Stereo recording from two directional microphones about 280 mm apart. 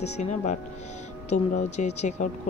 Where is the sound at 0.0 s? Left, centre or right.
Left.